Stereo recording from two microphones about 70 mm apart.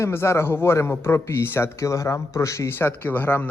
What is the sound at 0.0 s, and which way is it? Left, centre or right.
A man's voice, left.